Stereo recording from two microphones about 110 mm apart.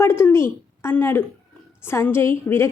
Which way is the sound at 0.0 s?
20° left (ahead or behind).